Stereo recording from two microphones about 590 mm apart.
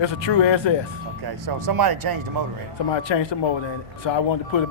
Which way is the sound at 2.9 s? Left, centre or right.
Left.